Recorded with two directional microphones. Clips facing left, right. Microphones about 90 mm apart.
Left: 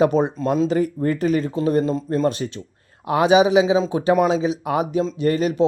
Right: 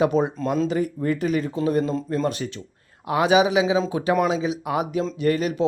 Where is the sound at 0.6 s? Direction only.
40° left (ahead or behind).